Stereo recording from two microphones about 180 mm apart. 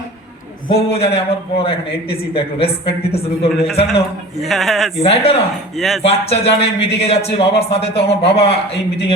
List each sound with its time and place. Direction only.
0.7 s a man's voice: 35° left (ahead or behind)
4.4 s speech: centre (ahead or behind)
4.9 s a man's voice: 35° left (ahead or behind)
5.7 s speech: centre (ahead or behind)
6.0 s a man's voice: 35° left (ahead or behind)